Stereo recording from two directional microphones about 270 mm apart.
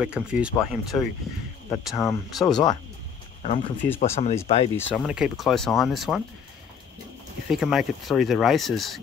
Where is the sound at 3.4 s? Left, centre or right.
Left.